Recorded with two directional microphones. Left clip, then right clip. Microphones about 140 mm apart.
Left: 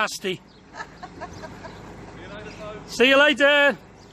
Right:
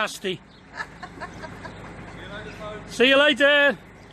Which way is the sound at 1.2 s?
20° right (ahead or behind).